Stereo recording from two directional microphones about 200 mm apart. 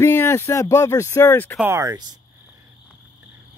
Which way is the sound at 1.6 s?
15° right (ahead or behind).